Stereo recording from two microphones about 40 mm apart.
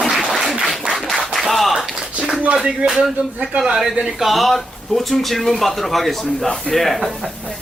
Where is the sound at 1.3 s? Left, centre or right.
Centre.